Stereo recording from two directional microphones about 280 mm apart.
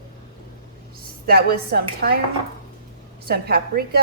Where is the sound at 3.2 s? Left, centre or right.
Right.